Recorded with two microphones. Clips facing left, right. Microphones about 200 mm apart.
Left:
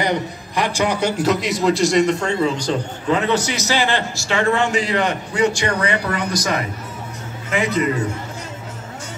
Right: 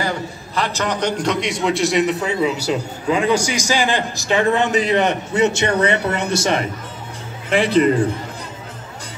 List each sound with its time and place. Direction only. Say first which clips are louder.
0.0 s a man's voice: left 3 dB; 15° left (ahead or behind); by 8.0 s 30° right (ahead or behind)